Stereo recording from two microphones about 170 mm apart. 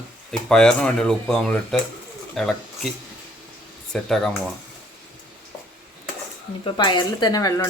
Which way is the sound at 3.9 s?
Centre (ahead or behind).